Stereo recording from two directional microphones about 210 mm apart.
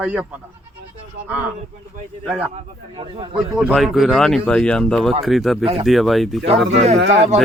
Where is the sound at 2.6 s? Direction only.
25° right (ahead or behind).